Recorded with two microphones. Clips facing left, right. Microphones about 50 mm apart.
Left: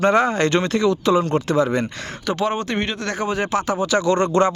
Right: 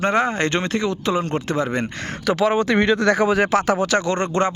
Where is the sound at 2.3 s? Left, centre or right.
Right.